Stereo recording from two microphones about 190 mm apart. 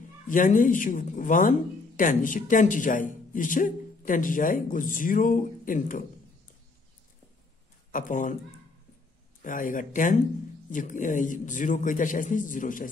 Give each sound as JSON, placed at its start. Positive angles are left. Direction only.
{"t": 0.3, "sound": "speech", "side_deg": 45}
{"t": 7.9, "sound": "speech", "side_deg": 45}
{"t": 9.4, "sound": "speech", "side_deg": 45}